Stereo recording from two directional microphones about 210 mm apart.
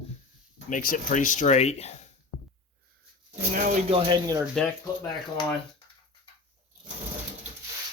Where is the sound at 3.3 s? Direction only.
30° right (ahead or behind).